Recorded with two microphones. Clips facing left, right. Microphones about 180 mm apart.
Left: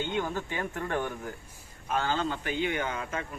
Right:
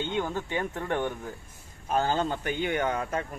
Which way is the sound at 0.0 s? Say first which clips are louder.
Right 1 dB; 20° right (ahead or behind).